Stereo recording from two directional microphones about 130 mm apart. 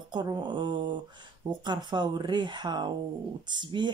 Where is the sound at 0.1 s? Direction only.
35° right (ahead or behind).